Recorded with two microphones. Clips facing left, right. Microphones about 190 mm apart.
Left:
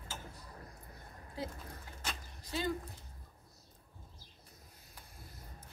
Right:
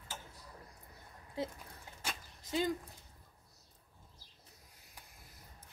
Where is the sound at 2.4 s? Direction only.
20° right (ahead or behind).